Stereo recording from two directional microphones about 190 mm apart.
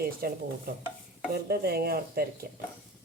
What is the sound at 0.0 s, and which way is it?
Speech, 50° right (ahead or behind).